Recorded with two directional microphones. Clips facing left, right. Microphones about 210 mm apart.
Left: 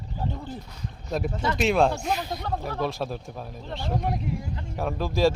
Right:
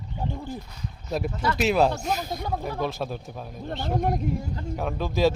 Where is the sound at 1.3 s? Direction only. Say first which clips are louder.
Even; 25° left (ahead or behind).